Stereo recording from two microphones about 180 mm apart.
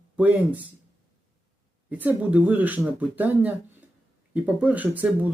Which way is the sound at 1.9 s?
10° right (ahead or behind).